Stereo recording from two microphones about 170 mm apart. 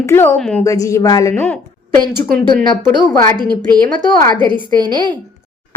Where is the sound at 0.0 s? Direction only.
15° left (ahead or behind).